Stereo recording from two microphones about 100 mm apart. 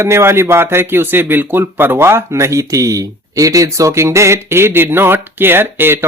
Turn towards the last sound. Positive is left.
turn(degrees=-20)  # may be behind; listen again after turning